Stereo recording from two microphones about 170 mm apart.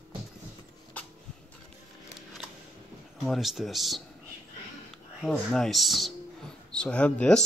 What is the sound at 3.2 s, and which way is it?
Speech, centre (ahead or behind).